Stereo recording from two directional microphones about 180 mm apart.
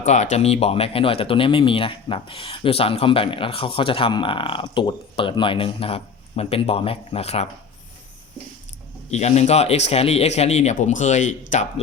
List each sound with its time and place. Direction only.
0.0 s speech: 40° left (ahead or behind)
9.0 s speech: 40° left (ahead or behind)